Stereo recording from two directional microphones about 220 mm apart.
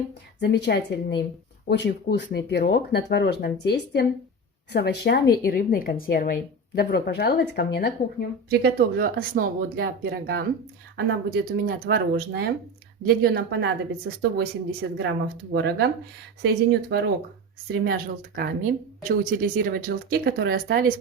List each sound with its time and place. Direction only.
0.3 s speech: 50° left (ahead or behind)
8.4 s speech: 45° right (ahead or behind)